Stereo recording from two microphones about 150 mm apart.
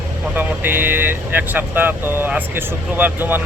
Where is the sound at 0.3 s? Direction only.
15° right (ahead or behind).